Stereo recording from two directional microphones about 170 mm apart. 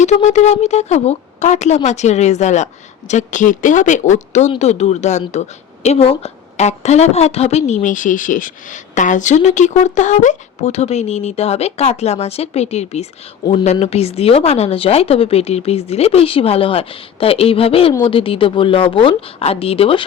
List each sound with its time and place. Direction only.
0.0 s a woman's voice: 45° left (ahead or behind)